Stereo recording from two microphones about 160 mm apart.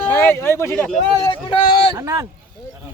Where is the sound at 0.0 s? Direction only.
10° left (ahead or behind).